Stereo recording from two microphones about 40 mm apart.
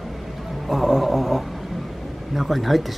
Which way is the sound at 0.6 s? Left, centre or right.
Centre.